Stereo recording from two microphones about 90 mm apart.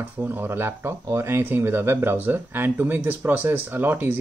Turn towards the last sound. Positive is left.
turn(degrees=-20)  # may be behind; listen again after turning